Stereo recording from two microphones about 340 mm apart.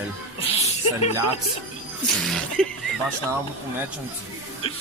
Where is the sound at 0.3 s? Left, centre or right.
Centre.